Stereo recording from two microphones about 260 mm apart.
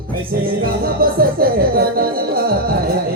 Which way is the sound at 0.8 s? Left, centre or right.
Right.